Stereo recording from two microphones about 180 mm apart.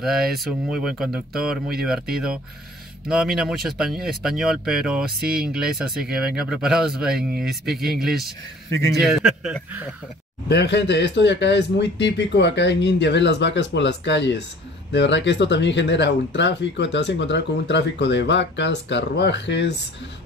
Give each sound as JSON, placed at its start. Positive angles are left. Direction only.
{"t": 0.0, "sound": "speech", "side_deg": 0}
{"t": 3.1, "sound": "speech", "side_deg": -5}
{"t": 8.6, "sound": "a man's voice", "side_deg": 15}
{"t": 8.9, "sound": "speech", "side_deg": 0}
{"t": 10.5, "sound": "speech", "side_deg": 70}